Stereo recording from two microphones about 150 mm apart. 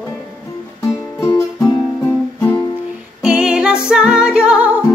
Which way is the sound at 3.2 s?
5° right (ahead or behind).